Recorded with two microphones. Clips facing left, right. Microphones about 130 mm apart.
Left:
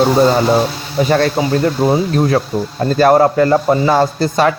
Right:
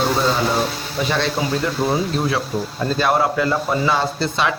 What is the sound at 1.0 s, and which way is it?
A man's voice, 45° left (ahead or behind).